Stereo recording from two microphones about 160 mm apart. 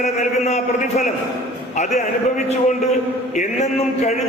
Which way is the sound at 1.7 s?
50° left (ahead or behind).